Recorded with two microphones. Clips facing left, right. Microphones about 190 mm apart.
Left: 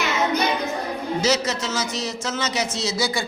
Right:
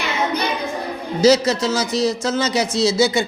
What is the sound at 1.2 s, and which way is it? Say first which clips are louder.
A man's voice: right 10 dB; 35° right (ahead or behind).